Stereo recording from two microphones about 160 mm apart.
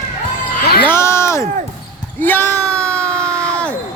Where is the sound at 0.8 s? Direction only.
15° left (ahead or behind).